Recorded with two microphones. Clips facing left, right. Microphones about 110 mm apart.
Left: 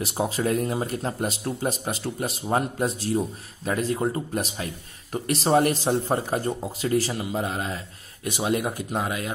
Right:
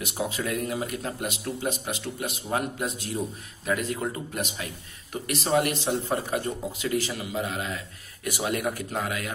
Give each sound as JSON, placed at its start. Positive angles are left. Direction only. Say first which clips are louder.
{"t": 0.0, "sound": "a man's voice", "louder": "left 4 dB", "side_deg": 35}